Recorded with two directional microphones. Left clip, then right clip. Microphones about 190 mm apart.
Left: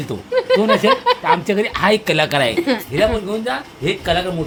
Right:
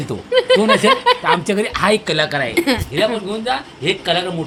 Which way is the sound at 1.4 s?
Centre (ahead or behind).